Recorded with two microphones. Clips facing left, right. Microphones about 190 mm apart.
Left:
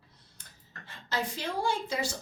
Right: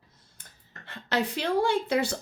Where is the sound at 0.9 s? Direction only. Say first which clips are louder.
Right 6 dB; 70° right (ahead or behind).